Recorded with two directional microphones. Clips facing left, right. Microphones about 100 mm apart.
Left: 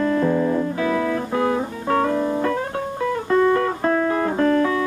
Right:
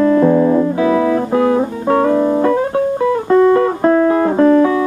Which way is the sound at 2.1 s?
55° right (ahead or behind).